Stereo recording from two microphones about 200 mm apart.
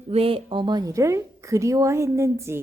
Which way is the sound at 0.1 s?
30° right (ahead or behind).